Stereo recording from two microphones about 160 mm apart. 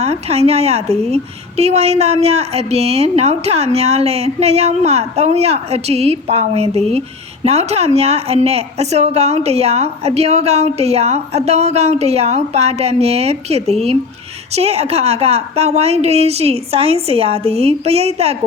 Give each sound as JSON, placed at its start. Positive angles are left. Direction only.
{"t": 0.0, "sound": "a woman's voice", "side_deg": -40}